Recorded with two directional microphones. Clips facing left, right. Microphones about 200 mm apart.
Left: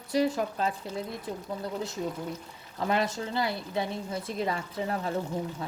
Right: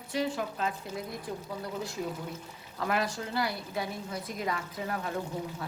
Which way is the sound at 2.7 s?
25° left (ahead or behind).